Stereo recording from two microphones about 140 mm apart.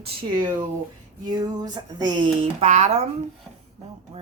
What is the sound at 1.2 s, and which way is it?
Speech, 30° right (ahead or behind).